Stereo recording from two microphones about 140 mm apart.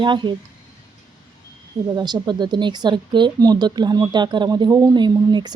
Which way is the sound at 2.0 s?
30° right (ahead or behind).